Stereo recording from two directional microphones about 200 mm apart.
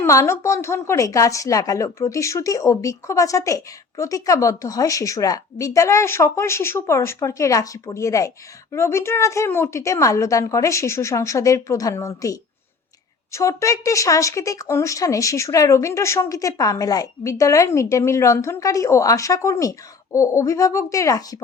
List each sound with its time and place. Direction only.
0.0 s a woman's voice: 15° left (ahead or behind)